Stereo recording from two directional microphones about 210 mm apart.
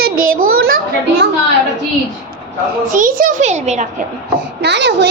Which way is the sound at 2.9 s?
40° right (ahead or behind).